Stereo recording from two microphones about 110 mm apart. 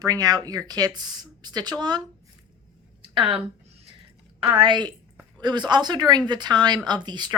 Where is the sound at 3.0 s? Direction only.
50° right (ahead or behind).